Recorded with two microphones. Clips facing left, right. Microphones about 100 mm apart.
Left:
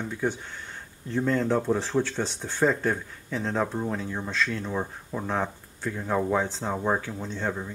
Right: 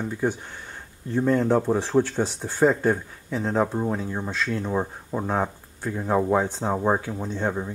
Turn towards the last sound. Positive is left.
turn(degrees=-20)  # may be behind; listen again after turning